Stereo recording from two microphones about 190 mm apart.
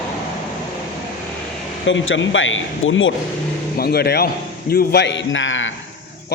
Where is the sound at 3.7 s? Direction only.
55° left (ahead or behind); by 5.7 s 90° left.